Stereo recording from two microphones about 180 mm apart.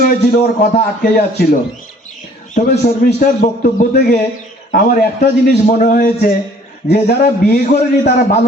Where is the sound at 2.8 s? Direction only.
50° left (ahead or behind).